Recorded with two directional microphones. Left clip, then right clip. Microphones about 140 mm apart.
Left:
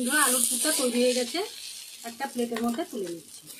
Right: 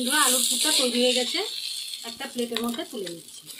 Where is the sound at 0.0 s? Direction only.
Centre (ahead or behind).